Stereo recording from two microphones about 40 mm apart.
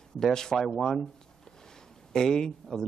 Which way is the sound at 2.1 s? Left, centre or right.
Centre.